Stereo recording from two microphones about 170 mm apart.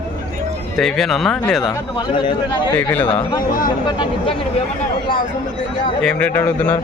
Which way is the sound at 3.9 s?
30° left (ahead or behind).